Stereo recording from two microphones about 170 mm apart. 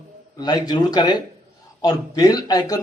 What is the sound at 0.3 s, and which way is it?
A man's voice, 25° left (ahead or behind).